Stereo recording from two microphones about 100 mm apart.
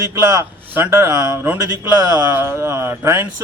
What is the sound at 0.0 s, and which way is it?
A man's voice, 30° right (ahead or behind).